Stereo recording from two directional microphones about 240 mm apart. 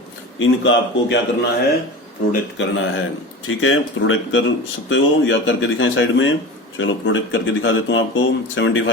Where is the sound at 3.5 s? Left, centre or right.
Left.